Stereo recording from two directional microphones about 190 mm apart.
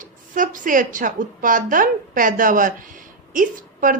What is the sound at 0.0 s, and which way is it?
A woman's voice, 45° right (ahead or behind).